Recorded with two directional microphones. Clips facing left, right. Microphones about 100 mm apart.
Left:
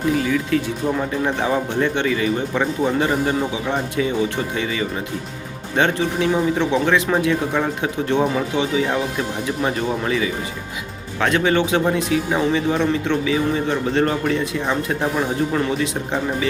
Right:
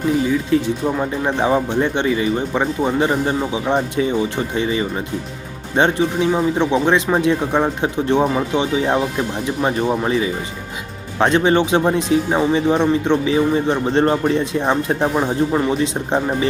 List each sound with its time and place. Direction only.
0.5 s speech: 25° right (ahead or behind)